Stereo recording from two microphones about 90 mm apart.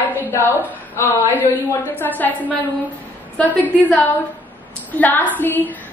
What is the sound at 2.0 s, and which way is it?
Speech, 20° left (ahead or behind).